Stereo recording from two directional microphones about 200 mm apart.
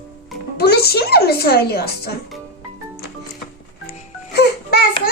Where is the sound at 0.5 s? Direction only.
55° left (ahead or behind).